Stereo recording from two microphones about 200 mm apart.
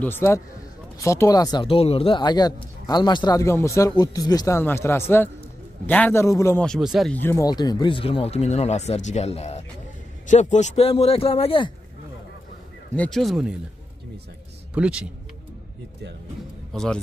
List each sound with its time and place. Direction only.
0.0 s a man's voice: 10° left (ahead or behind); by 11.7 s 25° left (ahead or behind)
12.9 s speech: 5° left (ahead or behind)
14.7 s a man's voice: 5° right (ahead or behind)
16.7 s speech: 5° left (ahead or behind)